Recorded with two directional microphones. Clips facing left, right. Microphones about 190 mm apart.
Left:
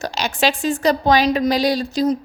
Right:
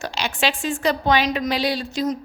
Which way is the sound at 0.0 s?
40° left (ahead or behind).